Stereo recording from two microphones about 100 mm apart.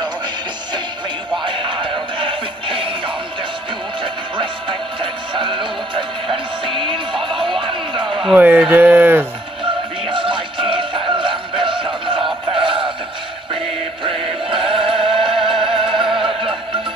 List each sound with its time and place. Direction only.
1.4 s music: 55° right (ahead or behind)
4.0 s music: 55° right (ahead or behind)
7.6 s a sound: 55° right (ahead or behind)
8.4 s speech: 20° right (ahead or behind)
10.0 s music: 60° right (ahead or behind)
12.5 s synthetic singing: 60° right (ahead or behind)
14.0 s music: 65° right (ahead or behind)
15.3 s music: centre (ahead or behind)
15.6 s music: 60° right (ahead or behind)